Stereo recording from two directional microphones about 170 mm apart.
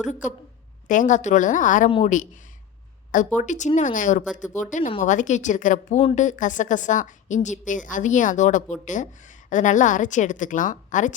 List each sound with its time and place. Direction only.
0.0 s a woman's voice: 45° left (ahead or behind)
3.3 s a woman's voice: 45° left (ahead or behind)